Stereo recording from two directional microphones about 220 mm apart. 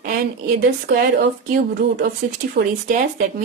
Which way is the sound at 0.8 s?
40° right (ahead or behind).